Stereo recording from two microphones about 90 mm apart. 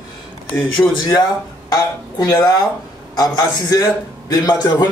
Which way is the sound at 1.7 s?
45° left (ahead or behind).